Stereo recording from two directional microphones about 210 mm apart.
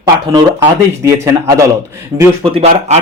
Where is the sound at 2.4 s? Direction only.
30° right (ahead or behind).